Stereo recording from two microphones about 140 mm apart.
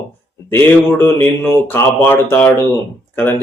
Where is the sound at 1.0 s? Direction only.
15° left (ahead or behind).